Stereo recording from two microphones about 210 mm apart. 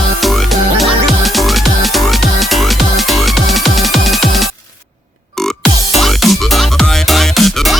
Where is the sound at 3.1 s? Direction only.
Centre (ahead or behind).